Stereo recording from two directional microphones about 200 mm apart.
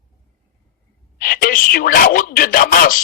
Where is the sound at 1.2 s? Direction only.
45° left (ahead or behind).